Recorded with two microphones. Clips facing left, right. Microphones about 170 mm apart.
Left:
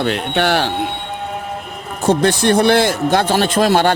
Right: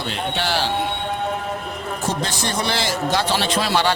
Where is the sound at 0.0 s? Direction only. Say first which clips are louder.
Left 8 dB; 60° left (ahead or behind).